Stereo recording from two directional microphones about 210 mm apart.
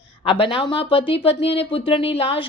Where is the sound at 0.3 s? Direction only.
25° left (ahead or behind).